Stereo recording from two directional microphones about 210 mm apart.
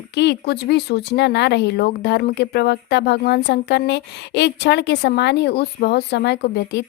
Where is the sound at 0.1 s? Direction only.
55° left (ahead or behind).